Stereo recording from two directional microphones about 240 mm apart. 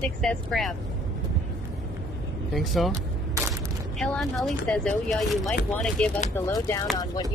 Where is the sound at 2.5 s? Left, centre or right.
Centre.